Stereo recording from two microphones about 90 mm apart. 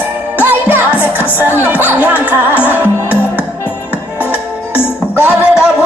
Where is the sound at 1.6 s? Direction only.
20° right (ahead or behind).